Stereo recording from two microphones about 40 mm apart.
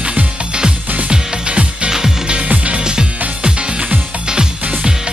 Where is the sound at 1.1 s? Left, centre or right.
Right.